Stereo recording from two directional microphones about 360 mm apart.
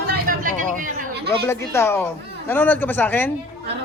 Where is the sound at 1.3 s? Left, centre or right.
Centre.